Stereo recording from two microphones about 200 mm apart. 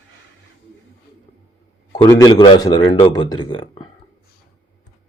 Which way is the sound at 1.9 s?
15° left (ahead or behind).